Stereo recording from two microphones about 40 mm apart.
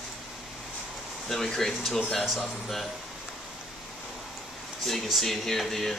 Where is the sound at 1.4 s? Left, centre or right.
Centre.